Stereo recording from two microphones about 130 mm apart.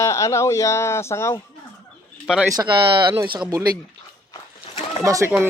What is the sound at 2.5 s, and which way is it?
Speech, 35° right (ahead or behind).